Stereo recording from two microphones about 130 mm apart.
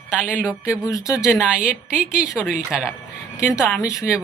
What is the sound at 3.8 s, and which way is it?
Speech, 25° left (ahead or behind).